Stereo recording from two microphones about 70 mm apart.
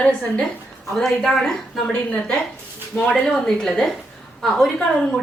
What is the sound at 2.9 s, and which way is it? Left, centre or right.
Speech, centre.